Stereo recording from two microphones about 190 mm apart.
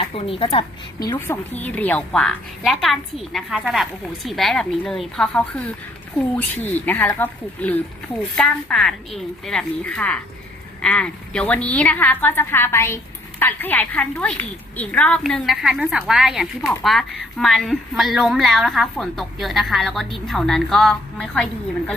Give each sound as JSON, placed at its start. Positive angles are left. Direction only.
{"t": 0.0, "sound": "a woman's voice", "side_deg": 30}
{"t": 1.5, "sound": "a woman's voice", "side_deg": 10}